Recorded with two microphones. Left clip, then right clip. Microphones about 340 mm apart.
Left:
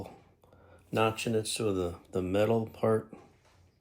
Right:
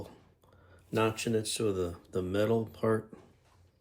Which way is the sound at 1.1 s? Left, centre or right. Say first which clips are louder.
Even; centre.